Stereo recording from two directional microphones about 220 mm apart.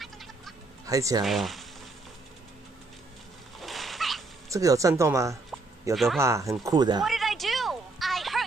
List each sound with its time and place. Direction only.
0.0 s a sound: centre (ahead or behind)
0.8 s speech: 15° right (ahead or behind)
1.2 s speech: centre (ahead or behind)
3.6 s a sound: centre (ahead or behind)
4.5 s speech: 15° right (ahead or behind)
7.0 s music: centre (ahead or behind)